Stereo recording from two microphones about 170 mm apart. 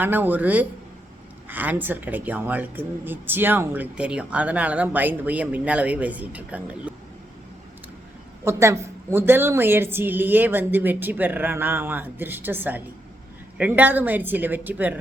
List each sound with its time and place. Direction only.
0.0 s speech: 10° right (ahead or behind)
8.4 s speech: 15° right (ahead or behind)